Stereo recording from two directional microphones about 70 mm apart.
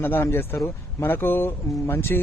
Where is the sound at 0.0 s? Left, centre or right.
Left.